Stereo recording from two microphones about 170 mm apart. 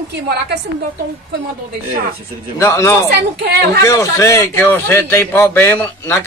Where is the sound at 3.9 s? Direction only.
20° left (ahead or behind).